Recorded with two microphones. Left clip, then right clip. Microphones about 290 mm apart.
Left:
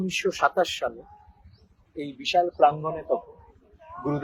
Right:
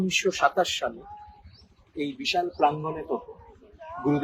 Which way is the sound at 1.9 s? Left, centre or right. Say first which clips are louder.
Left 3 dB; left.